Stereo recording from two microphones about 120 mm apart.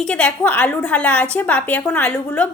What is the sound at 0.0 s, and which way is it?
A woman's voice, 10° left (ahead or behind).